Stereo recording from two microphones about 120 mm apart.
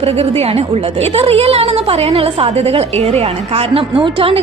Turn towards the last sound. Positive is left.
turn(degrees=-50)  # may be behind; listen again after turning